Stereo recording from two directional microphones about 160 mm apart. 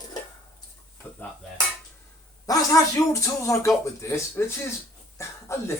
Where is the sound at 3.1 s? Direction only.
20° left (ahead or behind).